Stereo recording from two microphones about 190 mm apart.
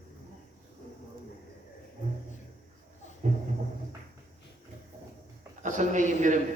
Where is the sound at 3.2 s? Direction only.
40° right (ahead or behind).